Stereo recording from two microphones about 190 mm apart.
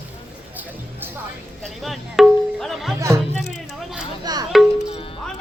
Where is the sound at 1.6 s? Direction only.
Centre (ahead or behind).